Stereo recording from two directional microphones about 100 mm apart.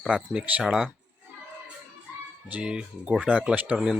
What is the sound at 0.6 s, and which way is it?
Speech, 5° right (ahead or behind).